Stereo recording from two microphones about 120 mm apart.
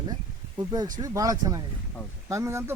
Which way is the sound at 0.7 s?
35° right (ahead or behind).